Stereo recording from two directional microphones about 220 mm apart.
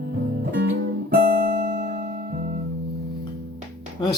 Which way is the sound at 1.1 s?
45° right (ahead or behind).